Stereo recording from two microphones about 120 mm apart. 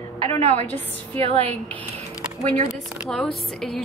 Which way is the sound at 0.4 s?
65° right (ahead or behind).